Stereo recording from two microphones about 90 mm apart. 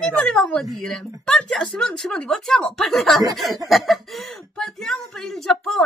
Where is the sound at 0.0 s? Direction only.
5° left (ahead or behind).